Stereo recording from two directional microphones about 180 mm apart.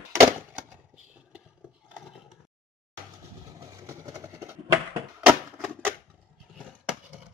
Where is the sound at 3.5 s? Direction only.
20° right (ahead or behind).